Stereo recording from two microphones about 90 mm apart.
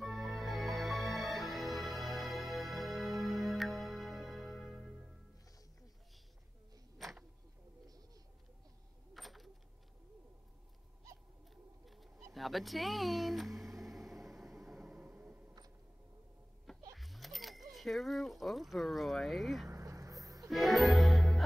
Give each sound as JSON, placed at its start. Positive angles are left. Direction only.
{"t": 0.0, "sound": "music", "side_deg": 0}
{"t": 7.0, "sound": "a sound", "side_deg": 0}
{"t": 9.1, "sound": "a sound", "side_deg": 0}
{"t": 11.8, "sound": "bird", "side_deg": 0}
{"t": 16.9, "sound": "speech", "side_deg": 0}
{"t": 19.7, "sound": "vehicle", "side_deg": -35}
{"t": 20.4, "sound": "music", "side_deg": 0}